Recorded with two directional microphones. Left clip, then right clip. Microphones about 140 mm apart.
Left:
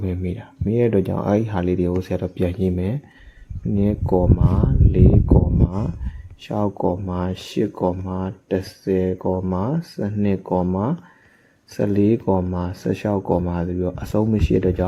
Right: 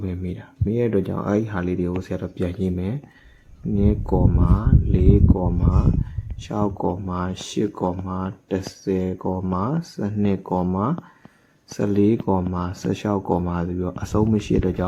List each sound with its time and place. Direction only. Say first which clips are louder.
0.0 s speech: left 4 dB; 35° left (ahead or behind); by 14.8 s 15° left (ahead or behind)